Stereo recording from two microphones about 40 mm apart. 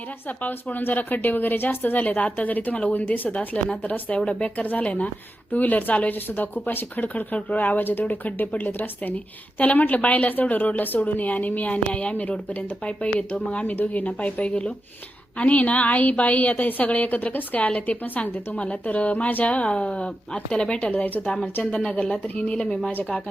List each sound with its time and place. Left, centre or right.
0.4 s a woman's voice: left
2.0 s a woman's voice: left
5.5 s speech: left
11.9 s a woman's voice: left
13.7 s a woman's voice: left
19.5 s speech: left
20.9 s speech: left
21.8 s speech: left